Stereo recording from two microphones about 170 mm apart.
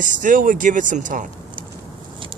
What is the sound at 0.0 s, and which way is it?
Speech, 50° right (ahead or behind).